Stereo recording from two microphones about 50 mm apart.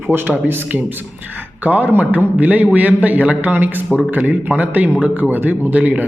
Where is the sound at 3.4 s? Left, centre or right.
Right.